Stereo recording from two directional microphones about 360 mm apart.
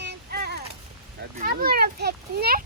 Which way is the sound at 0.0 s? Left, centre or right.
Right.